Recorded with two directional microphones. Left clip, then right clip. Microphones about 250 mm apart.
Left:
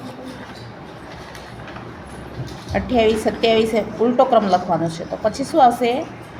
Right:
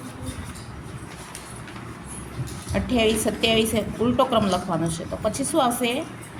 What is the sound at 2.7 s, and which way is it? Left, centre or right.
A woman's voice, centre.